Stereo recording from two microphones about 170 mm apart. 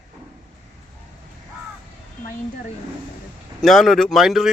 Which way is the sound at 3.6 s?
Centre (ahead or behind).